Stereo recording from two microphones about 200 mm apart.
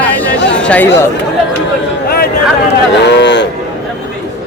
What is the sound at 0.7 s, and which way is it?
Speech, 10° left (ahead or behind).